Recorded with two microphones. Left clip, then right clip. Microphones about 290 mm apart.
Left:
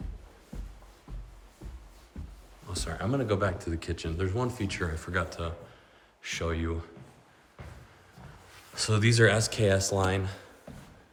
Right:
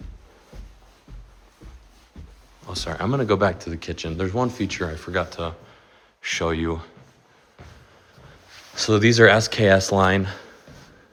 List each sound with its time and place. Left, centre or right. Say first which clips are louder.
2.6 s speech: right 7 dB; centre
3.7 s speech: right 5 dB; centre
8.7 s speech: right 10 dB; centre